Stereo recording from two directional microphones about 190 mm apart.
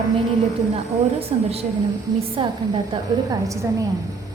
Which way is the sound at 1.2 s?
30° right (ahead or behind).